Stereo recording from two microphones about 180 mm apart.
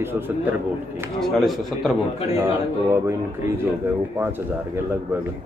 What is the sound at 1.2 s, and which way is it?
Speech, centre (ahead or behind).